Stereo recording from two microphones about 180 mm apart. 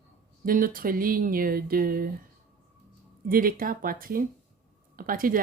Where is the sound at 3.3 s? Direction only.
50° right (ahead or behind).